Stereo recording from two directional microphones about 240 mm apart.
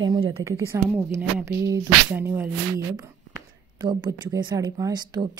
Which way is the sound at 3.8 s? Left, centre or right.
Centre.